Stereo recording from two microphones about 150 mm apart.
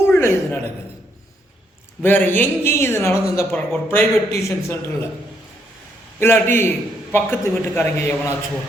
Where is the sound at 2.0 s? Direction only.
15° left (ahead or behind).